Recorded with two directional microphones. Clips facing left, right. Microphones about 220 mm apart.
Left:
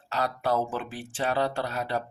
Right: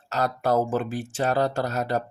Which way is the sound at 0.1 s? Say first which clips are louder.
Right 4 dB; 45° right (ahead or behind).